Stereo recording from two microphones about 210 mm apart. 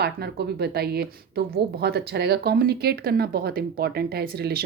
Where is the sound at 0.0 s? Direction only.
50° right (ahead or behind).